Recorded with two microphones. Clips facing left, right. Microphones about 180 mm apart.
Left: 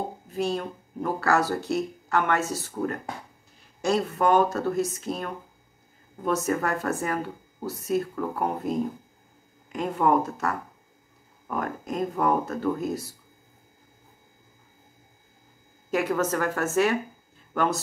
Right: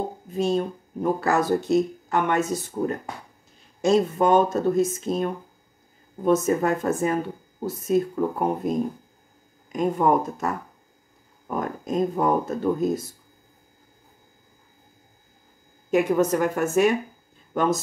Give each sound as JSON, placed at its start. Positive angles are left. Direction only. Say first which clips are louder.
{"t": 0.3, "sound": "speech", "louder": "right 5 dB", "side_deg": -20}
{"t": 15.9, "sound": "speech", "louder": "right 5 dB", "side_deg": -20}